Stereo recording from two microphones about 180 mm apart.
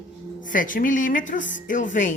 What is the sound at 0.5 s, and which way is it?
A woman's voice, 50° left (ahead or behind).